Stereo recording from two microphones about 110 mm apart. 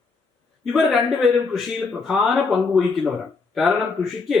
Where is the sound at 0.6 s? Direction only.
5° right (ahead or behind).